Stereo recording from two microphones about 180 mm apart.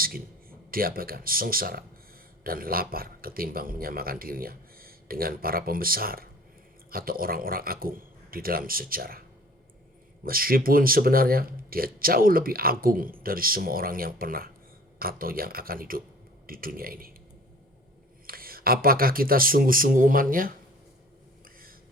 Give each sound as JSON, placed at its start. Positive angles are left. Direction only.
{"t": 0.7, "sound": "speech", "side_deg": -55}
{"t": 10.2, "sound": "speech", "side_deg": -55}
{"t": 18.3, "sound": "speech", "side_deg": -55}